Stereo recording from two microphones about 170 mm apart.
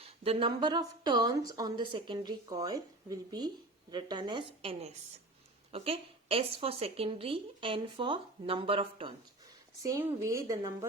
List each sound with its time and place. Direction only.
0.0 s a woman's voice: 35° right (ahead or behind)
9.8 s speech: 15° right (ahead or behind)